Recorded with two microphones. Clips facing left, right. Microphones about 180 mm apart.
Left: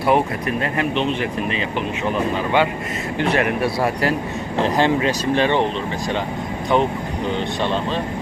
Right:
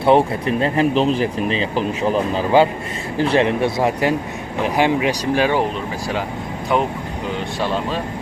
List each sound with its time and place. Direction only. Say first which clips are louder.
0.0 s speech: right 3 dB; 30° right (ahead or behind); by 5.6 s 10° right (ahead or behind)
7.6 s speech: right 2 dB; 5° right (ahead or behind)